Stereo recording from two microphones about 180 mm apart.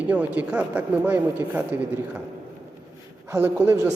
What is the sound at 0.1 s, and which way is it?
Speech, 10° right (ahead or behind).